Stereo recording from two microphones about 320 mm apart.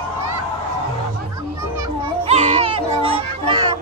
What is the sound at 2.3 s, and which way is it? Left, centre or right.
Music, right.